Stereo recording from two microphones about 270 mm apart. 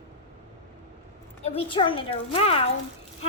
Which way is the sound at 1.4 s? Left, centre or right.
Left.